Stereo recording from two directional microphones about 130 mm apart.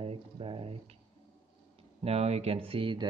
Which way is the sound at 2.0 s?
50° right (ahead or behind).